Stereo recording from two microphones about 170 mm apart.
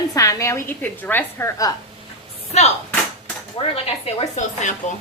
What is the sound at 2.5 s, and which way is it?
Speech, 40° left (ahead or behind).